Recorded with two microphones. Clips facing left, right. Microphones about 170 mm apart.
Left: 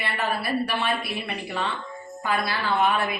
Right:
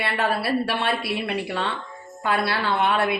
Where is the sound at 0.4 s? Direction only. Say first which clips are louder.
Right 2 dB; 70° right (ahead or behind).